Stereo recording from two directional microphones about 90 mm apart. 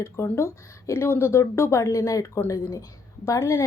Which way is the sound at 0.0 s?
30° left (ahead or behind).